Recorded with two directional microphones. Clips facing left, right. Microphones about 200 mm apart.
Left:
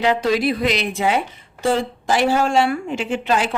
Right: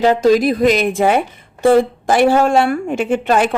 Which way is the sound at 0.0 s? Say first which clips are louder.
Right 6 dB; 45° right (ahead or behind).